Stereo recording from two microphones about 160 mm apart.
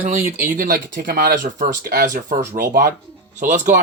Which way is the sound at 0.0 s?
60° right (ahead or behind).